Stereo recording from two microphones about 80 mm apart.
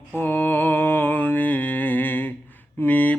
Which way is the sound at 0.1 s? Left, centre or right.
Left.